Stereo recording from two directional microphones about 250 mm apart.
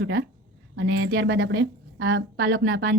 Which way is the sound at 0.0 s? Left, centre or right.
Right.